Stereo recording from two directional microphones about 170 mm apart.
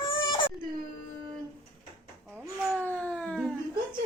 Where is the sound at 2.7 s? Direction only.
5° left (ahead or behind).